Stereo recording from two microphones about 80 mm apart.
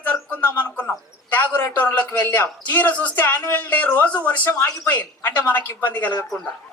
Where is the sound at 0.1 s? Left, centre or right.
Left.